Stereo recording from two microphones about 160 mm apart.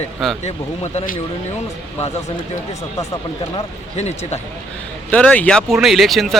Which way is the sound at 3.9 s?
45° left (ahead or behind).